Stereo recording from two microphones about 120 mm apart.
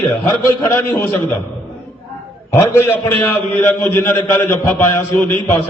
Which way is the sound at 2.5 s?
15° left (ahead or behind).